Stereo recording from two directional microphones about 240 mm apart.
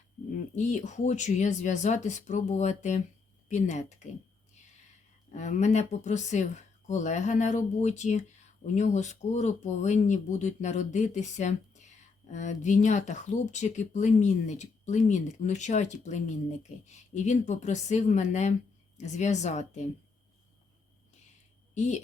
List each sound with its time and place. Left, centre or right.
0.3 s speech: left
5.3 s speech: left
21.8 s speech: left